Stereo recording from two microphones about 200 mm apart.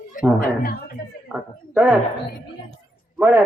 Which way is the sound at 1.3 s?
10° right (ahead or behind).